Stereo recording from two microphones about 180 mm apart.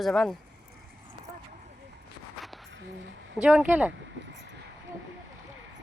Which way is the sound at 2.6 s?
85° right.